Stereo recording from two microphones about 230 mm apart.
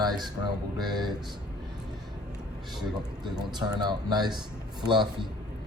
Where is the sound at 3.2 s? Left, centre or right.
Centre.